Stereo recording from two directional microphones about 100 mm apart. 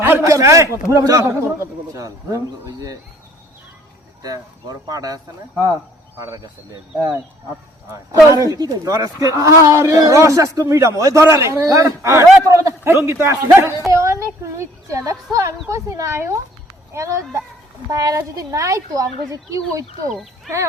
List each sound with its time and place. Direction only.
0.0 s a man's voice: 30° right (ahead or behind)
4.2 s a man's voice: 40° right (ahead or behind)
7.9 s a man's voice: 35° right (ahead or behind)